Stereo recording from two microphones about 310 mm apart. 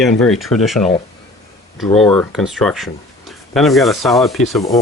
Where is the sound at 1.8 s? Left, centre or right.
Centre.